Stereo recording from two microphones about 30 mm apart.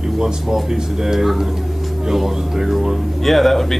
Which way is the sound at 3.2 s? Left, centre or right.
Centre.